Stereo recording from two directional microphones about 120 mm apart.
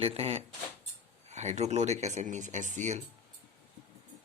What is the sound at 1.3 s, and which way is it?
Speech, 70° right (ahead or behind).